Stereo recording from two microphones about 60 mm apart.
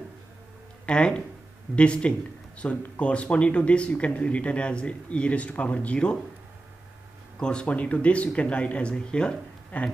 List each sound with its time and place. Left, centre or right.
0.8 s speech: centre
7.3 s speech: centre